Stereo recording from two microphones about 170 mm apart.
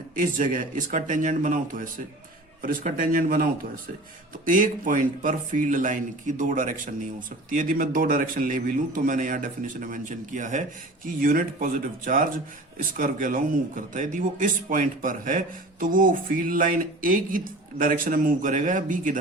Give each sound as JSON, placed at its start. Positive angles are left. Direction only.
{"t": 0.2, "sound": "a man's voice", "side_deg": -50}